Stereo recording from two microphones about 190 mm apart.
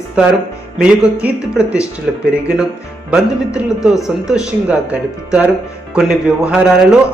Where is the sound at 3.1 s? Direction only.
5° right (ahead or behind).